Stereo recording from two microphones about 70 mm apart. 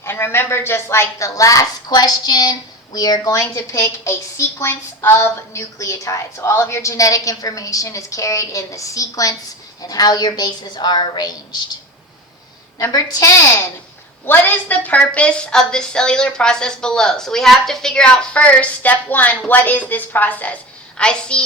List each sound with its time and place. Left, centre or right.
0.0 s a woman's voice: left
3.7 s a woman's voice: left
9.8 s a woman's voice: left
12.9 s a woman's voice: left
14.3 s a woman's voice: left
21.0 s a woman's voice: centre